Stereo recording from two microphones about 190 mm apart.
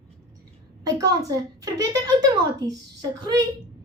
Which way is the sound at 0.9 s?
20° right (ahead or behind).